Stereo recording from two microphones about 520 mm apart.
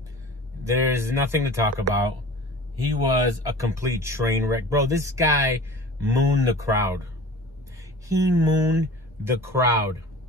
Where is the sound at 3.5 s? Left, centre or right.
Centre.